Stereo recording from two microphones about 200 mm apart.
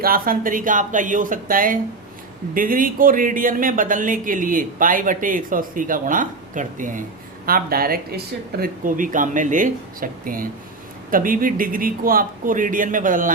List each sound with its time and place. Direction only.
0.0 s speech: 45° right (ahead or behind)